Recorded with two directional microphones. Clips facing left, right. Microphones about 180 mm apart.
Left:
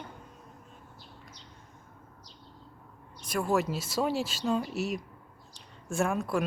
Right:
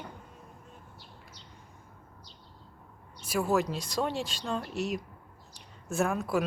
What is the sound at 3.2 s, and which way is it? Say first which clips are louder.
Speech: right 1 dB; 5° right (ahead or behind).